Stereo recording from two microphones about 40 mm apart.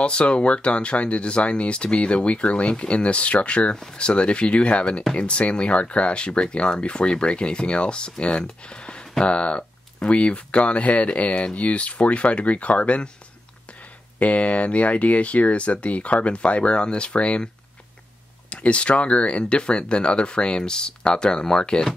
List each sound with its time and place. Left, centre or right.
0.0 s speech: left
14.2 s speech: left
18.5 s speech: left